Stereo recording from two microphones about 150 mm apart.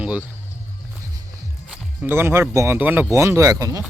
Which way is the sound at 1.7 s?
15° right (ahead or behind).